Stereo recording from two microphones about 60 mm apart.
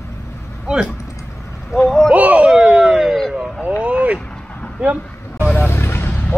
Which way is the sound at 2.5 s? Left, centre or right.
Centre.